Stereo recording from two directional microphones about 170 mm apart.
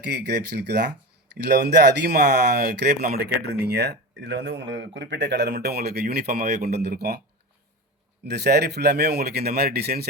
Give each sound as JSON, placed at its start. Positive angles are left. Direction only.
{"t": 0.0, "sound": "speech", "side_deg": -75}
{"t": 8.2, "sound": "speech", "side_deg": -75}